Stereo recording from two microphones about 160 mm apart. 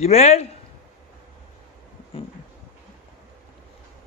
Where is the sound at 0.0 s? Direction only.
45° left (ahead or behind).